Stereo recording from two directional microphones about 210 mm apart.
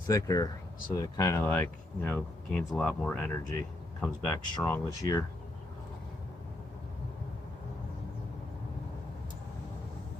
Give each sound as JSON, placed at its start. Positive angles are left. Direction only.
{"t": 0.1, "sound": "speech", "side_deg": 15}